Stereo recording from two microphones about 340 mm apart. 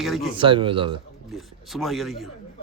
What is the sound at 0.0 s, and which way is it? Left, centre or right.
Speech, centre.